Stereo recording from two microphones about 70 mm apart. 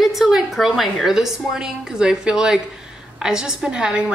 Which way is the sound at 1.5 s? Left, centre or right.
Centre.